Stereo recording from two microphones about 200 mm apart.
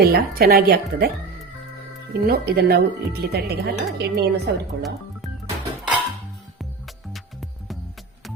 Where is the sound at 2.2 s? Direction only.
50° right (ahead or behind).